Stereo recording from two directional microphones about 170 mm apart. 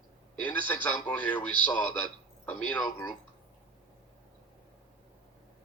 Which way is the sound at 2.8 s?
20° left (ahead or behind).